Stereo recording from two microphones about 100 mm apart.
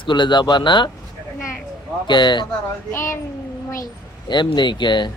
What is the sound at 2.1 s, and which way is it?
Speech, 50° left (ahead or behind).